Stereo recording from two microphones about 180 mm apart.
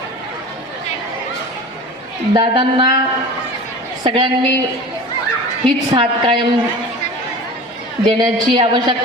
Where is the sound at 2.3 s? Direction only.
25° right (ahead or behind).